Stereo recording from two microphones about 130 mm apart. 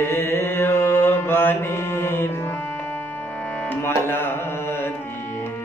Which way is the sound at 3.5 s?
15° left (ahead or behind).